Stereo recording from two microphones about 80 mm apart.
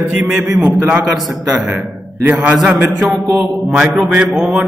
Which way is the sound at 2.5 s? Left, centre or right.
Centre.